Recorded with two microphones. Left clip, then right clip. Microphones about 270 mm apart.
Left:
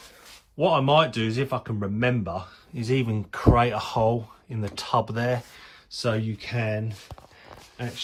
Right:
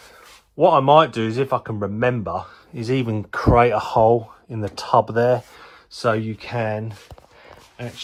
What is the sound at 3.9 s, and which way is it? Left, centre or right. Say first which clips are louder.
Speech: right 8 dB; right.